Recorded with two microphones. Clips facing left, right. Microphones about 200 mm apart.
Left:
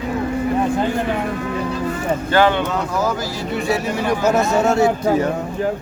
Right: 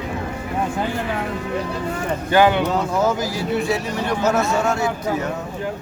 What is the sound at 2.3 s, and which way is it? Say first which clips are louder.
Speech: right 1 dB; 15° right (ahead or behind).